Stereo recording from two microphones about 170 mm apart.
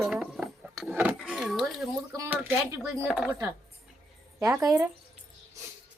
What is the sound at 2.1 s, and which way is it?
Speech, 15° right (ahead or behind).